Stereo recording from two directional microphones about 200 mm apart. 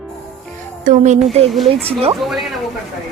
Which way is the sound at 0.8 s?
40° right (ahead or behind).